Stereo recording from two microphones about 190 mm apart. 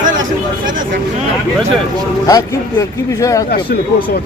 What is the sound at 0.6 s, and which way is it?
Speech, 45° right (ahead or behind).